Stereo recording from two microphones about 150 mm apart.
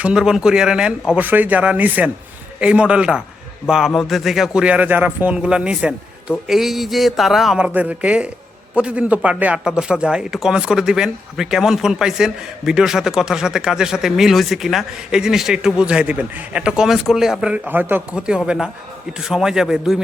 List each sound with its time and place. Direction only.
0.0 s a man's voice: 5° right (ahead or behind)